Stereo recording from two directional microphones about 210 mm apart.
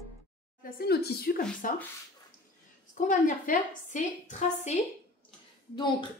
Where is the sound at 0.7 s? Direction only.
50° left (ahead or behind).